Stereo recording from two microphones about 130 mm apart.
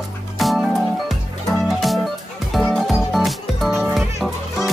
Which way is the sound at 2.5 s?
Centre (ahead or behind).